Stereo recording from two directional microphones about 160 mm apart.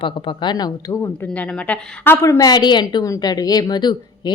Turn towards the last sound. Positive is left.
turn(degrees=25)  # may be behind; listen again after turning